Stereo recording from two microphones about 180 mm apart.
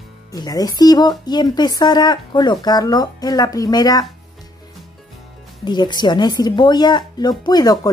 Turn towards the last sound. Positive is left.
turn(degrees=20)  # may be behind; listen again after turning